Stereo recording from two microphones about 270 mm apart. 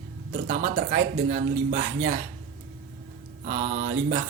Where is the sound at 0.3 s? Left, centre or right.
Right.